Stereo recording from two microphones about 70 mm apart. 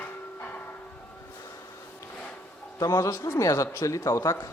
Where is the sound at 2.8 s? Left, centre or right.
Left.